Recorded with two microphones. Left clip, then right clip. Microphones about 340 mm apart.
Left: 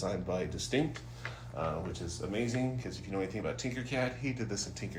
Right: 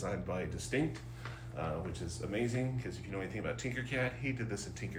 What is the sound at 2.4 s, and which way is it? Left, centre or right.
Speech, centre.